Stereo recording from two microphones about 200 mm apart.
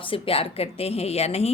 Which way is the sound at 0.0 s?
25° left (ahead or behind).